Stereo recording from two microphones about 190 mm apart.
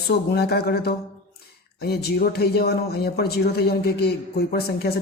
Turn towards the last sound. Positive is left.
turn(degrees=55)  # may be behind; listen again after turning